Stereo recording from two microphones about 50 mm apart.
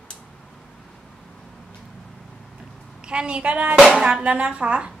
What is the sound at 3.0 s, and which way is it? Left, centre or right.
A woman's voice, centre.